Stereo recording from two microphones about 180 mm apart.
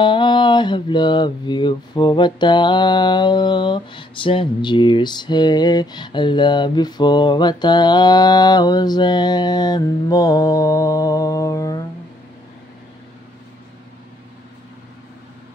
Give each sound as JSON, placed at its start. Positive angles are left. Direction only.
{"t": 0.0, "sound": "mantra", "side_deg": 25}